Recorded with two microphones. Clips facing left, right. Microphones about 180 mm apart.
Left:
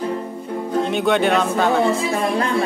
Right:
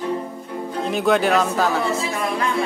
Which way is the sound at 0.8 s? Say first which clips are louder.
Even; centre (ahead or behind).